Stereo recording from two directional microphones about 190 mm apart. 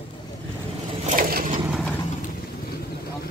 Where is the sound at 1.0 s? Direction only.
50° right (ahead or behind).